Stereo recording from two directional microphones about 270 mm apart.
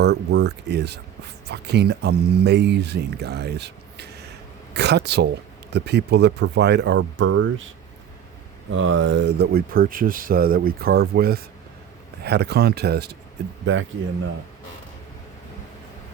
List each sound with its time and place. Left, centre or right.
0.0 s speech: right
8.7 s speech: right